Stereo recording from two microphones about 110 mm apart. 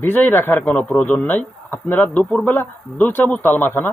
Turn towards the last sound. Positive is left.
turn(degrees=20)  # may be behind; listen again after turning